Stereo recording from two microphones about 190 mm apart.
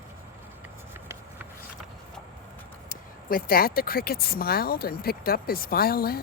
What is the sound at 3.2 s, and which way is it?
A woman's voice, 50° left (ahead or behind).